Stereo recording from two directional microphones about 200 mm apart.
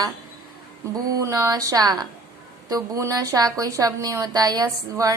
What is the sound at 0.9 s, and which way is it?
A woman's voice, 15° right (ahead or behind).